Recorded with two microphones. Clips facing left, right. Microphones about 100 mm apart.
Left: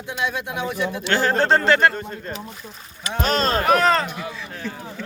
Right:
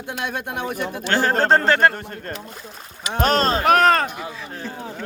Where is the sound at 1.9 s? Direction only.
65° right (ahead or behind).